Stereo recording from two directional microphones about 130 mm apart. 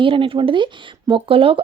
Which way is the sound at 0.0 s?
40° right (ahead or behind).